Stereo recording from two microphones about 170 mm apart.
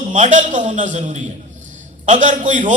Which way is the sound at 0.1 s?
45° right (ahead or behind).